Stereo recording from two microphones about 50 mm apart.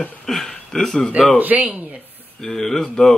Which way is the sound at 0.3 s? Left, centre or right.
Centre.